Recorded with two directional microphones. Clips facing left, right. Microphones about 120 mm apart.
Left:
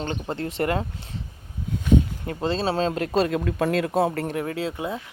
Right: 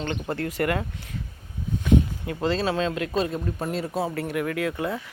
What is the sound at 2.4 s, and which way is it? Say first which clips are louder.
Speech: left 1 dB; 25° left (ahead or behind).